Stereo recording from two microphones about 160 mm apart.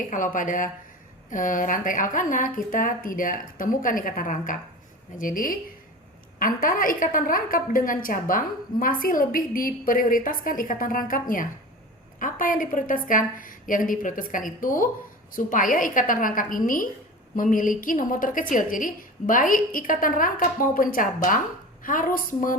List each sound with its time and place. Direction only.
0.0 s a woman's voice: 55° left (ahead or behind)